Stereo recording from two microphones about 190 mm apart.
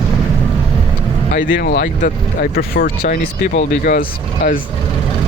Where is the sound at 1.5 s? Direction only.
60° left (ahead or behind).